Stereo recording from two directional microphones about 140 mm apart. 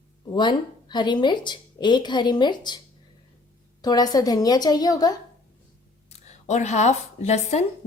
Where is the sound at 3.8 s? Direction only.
30° left (ahead or behind).